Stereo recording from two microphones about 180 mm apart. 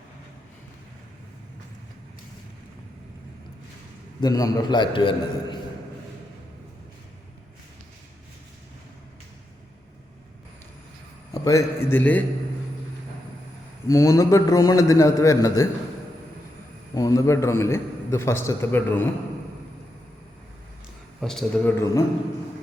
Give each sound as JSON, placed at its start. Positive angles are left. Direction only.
{"t": 4.2, "sound": "a man's voice", "side_deg": 20}
{"t": 11.4, "sound": "a man's voice", "side_deg": 15}
{"t": 13.8, "sound": "a man's voice", "side_deg": 15}
{"t": 16.9, "sound": "a man's voice", "side_deg": 20}
{"t": 21.2, "sound": "a man's voice", "side_deg": 0}